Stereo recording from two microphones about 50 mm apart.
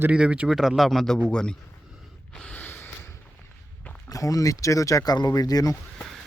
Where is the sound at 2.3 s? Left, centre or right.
Centre.